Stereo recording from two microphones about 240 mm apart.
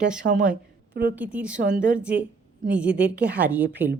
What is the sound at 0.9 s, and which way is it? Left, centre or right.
Speech, right.